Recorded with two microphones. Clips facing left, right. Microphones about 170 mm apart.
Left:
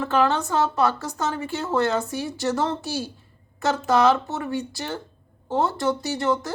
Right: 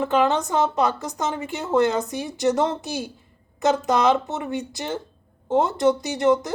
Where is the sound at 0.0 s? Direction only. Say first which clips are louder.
Right 1 dB; 15° right (ahead or behind).